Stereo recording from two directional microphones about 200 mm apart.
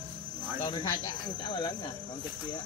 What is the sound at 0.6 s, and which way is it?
Speech, 20° left (ahead or behind).